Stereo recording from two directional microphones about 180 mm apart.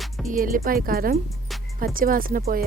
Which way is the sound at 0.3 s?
50° right (ahead or behind).